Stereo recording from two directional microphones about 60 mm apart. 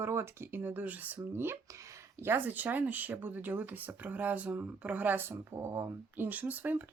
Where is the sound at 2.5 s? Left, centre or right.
Right.